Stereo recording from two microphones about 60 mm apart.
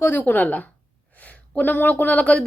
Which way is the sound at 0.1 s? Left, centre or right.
Left.